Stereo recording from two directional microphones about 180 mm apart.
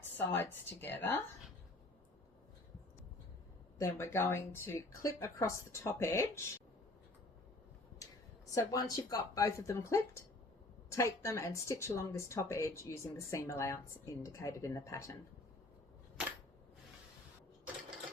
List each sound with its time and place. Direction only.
0.2 s speech: 10° left (ahead or behind)
3.8 s speech: 15° left (ahead or behind)
8.5 s speech: 20° left (ahead or behind)